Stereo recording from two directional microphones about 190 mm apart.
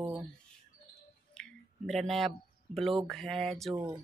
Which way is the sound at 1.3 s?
5° left (ahead or behind).